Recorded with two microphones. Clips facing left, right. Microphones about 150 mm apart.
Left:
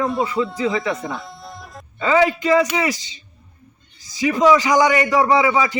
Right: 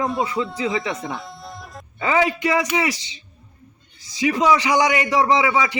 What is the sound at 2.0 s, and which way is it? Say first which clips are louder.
A man's voice: left 3 dB; 15° right (ahead or behind).